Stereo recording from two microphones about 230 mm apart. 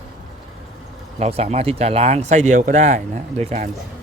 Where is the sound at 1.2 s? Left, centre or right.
Right.